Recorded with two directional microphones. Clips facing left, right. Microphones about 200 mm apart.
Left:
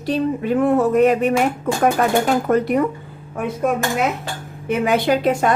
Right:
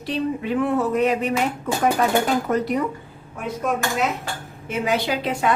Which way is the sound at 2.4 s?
55° left (ahead or behind).